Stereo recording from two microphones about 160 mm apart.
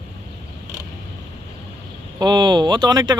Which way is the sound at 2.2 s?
25° right (ahead or behind).